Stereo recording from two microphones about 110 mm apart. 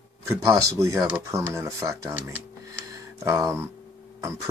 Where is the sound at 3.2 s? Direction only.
30° right (ahead or behind).